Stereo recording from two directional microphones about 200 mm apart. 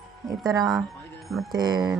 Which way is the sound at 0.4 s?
20° right (ahead or behind).